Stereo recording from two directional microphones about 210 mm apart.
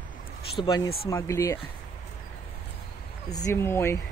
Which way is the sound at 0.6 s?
20° left (ahead or behind).